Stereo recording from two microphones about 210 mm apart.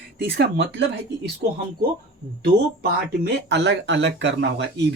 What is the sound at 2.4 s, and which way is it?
Speech, 50° right (ahead or behind).